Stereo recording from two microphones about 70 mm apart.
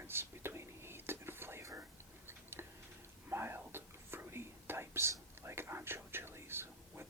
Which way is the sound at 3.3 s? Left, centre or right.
Right.